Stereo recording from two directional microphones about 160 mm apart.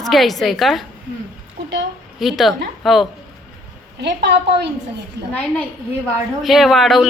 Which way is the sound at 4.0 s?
90° right.